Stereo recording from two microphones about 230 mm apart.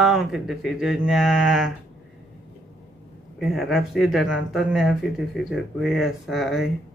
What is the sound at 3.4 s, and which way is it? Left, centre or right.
Speech, centre.